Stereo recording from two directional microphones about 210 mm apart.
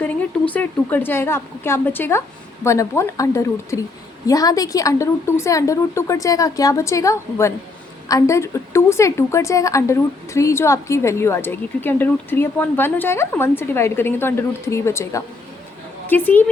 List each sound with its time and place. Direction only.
0.0 s a woman's voice: 5° left (ahead or behind)